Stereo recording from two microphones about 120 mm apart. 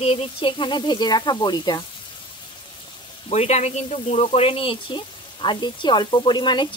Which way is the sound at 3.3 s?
65° left (ahead or behind).